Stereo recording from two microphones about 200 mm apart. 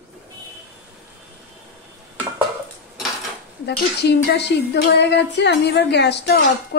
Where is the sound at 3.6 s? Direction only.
55° left (ahead or behind).